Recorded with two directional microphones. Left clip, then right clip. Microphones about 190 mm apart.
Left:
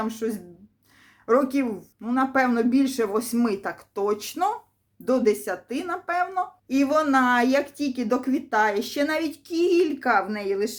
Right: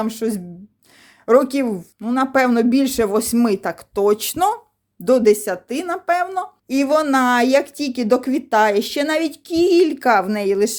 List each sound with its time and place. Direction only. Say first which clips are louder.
0.0 s a woman's voice: right 6 dB; 50° right (ahead or behind)